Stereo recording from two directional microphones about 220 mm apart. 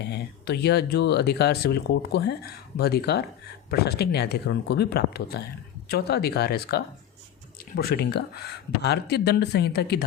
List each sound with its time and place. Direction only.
0.0 s speech: 50° left (ahead or behind)